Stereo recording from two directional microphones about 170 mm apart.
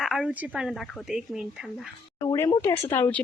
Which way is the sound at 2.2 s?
15° left (ahead or behind).